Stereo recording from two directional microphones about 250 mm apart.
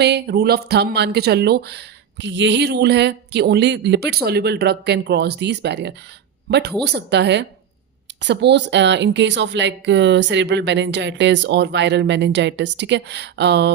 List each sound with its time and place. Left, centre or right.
0.0 s speech: right